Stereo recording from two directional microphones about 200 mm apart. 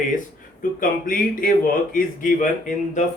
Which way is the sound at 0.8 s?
45° left (ahead or behind).